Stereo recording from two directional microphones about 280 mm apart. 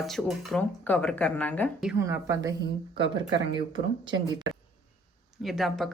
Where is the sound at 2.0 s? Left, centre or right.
Centre.